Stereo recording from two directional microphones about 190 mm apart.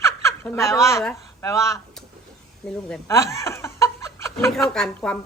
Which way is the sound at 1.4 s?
15° left (ahead or behind).